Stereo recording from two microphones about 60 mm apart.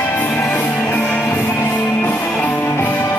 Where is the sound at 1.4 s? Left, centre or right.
Left.